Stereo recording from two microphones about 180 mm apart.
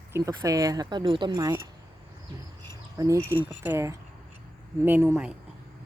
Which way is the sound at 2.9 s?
15° right (ahead or behind).